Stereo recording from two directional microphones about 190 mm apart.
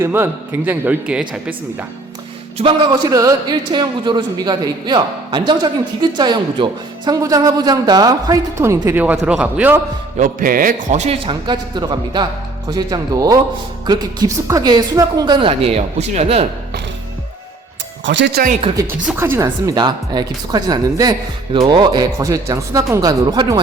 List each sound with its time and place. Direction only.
0.0 s a woman's voice: 10° right (ahead or behind)
2.6 s a man's voice: 25° right (ahead or behind); by 9.8 s 10° right (ahead or behind)
10.2 s a man's voice: 45° right (ahead or behind)
18.0 s speech: 70° right (ahead or behind)
19.0 s a man's voice: 10° right (ahead or behind)